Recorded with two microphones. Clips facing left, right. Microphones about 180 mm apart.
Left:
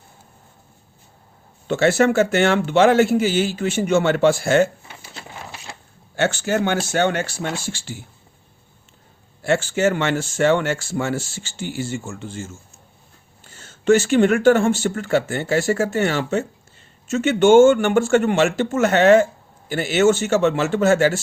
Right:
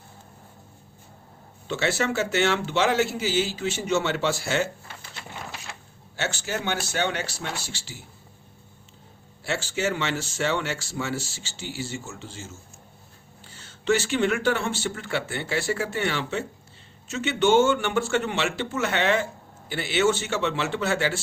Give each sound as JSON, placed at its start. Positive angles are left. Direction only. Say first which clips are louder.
{"t": 1.6, "sound": "speech", "louder": "left 9 dB", "side_deg": 50}
{"t": 6.1, "sound": "speech", "louder": "left 10 dB", "side_deg": 50}
{"t": 9.4, "sound": "speech", "louder": "left 9 dB", "side_deg": 50}